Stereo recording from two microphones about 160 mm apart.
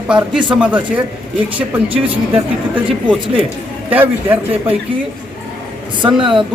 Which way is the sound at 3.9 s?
10° right (ahead or behind).